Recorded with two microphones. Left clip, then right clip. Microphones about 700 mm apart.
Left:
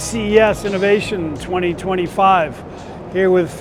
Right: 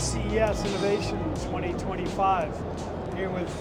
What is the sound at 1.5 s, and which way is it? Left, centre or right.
Speech, left.